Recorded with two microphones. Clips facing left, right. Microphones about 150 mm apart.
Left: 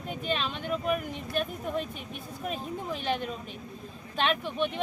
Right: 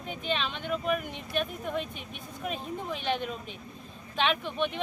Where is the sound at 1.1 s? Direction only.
45° left (ahead or behind).